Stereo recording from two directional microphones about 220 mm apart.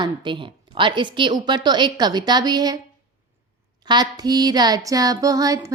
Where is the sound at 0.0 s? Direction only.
20° right (ahead or behind).